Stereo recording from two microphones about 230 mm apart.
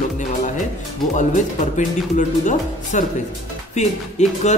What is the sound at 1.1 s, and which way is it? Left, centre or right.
Speech, left.